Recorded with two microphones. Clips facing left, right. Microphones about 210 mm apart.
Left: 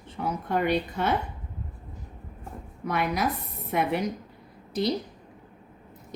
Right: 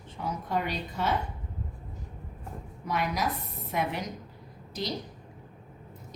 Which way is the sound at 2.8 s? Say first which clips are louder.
Left 3 dB; 60° left (ahead or behind).